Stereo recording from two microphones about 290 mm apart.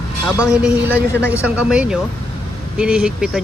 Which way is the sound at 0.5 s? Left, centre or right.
Centre.